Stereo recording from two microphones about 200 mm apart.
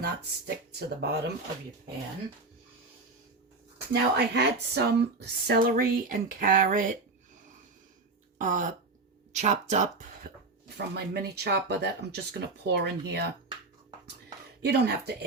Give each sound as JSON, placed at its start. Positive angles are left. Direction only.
{"t": 0.0, "sound": "speech", "side_deg": -55}
{"t": 3.9, "sound": "speech", "side_deg": -55}
{"t": 8.4, "sound": "speech", "side_deg": -40}
{"t": 10.8, "sound": "speech", "side_deg": -55}
{"t": 14.6, "sound": "speech", "side_deg": -55}